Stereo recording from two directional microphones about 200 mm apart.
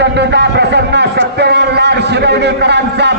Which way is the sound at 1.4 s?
55° right (ahead or behind).